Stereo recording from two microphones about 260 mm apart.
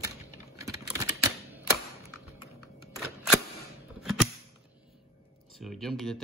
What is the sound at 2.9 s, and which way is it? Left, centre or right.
Single-lens reflex camera, centre.